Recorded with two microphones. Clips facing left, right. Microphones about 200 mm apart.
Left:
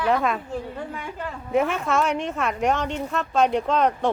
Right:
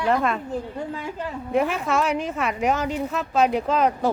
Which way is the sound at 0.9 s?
20° right (ahead or behind).